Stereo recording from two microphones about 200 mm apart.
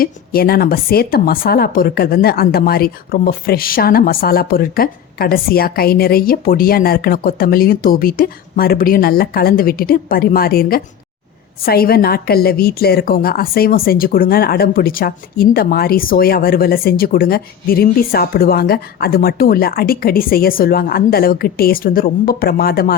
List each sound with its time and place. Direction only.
0.0 s a woman's voice: 50° left (ahead or behind)